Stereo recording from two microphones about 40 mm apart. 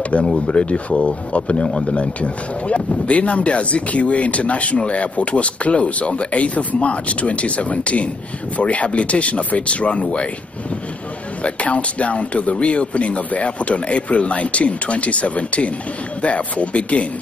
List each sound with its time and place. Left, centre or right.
0.5 s speech: left
11.4 s speech: left